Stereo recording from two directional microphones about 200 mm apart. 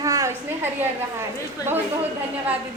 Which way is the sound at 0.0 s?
15° right (ahead or behind).